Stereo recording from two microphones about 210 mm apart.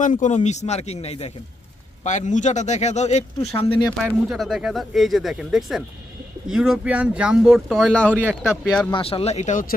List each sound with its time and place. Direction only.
0.0 s speech: 35° left (ahead or behind)
3.7 s speech: 20° left (ahead or behind)
4.3 s speech: centre (ahead or behind)
8.9 s speech: 25° left (ahead or behind)